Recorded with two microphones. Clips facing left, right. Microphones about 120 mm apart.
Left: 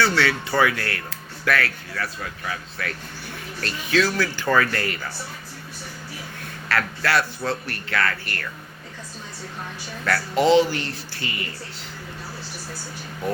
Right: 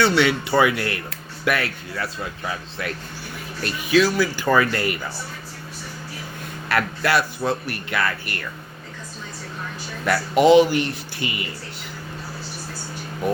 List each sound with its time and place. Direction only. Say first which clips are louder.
0.0 s speech: right 3 dB; 20° right (ahead or behind)
3.6 s speech: right 4 dB; 10° right (ahead or behind)
6.7 s speech: right 2 dB; 15° right (ahead or behind)
10.1 s speech: right 3 dB; 15° right (ahead or behind)